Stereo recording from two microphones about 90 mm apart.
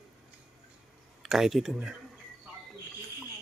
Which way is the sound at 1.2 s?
5° right (ahead or behind).